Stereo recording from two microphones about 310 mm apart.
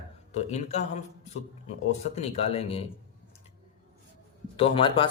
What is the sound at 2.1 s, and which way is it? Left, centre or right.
Speech, centre.